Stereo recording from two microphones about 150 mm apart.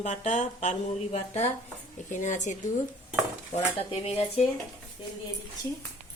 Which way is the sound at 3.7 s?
40° left (ahead or behind).